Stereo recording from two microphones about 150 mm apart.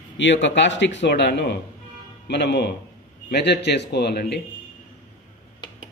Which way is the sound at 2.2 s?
90° left.